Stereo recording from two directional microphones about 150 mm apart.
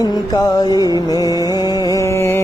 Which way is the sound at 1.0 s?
25° left (ahead or behind).